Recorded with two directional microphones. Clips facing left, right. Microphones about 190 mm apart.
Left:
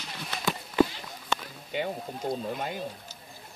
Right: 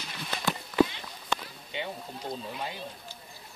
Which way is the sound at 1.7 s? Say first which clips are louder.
Left 5 dB; 50° left (ahead or behind).